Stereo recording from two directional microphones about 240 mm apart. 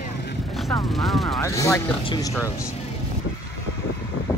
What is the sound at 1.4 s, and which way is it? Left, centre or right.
Speech, centre.